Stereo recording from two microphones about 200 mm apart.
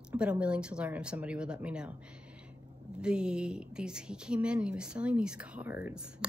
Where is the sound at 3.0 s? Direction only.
5° right (ahead or behind).